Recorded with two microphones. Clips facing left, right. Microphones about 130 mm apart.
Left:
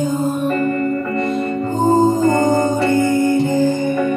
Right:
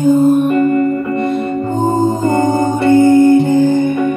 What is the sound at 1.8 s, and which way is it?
Music, 55° right (ahead or behind).